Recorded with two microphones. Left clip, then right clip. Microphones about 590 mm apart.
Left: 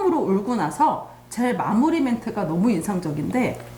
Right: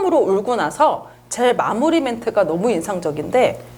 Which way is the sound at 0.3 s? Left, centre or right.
Right.